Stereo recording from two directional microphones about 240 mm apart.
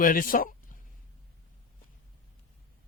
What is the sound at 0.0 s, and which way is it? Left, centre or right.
Speech, left.